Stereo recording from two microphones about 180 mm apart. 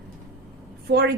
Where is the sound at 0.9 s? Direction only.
70° right (ahead or behind).